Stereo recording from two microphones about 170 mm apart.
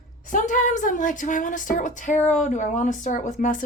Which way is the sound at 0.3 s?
50° left (ahead or behind).